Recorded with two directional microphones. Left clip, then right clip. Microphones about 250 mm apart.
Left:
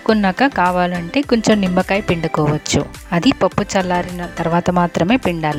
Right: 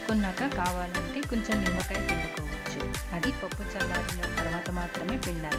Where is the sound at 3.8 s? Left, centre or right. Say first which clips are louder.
Left 12 dB; centre.